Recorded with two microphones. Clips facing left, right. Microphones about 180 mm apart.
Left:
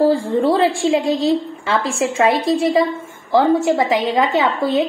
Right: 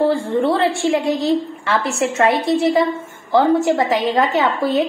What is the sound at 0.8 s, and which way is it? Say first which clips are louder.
A woman's voice: left 1 dB; 20° left (ahead or behind).